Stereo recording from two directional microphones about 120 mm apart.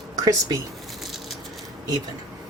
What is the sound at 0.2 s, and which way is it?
Speech, 30° right (ahead or behind).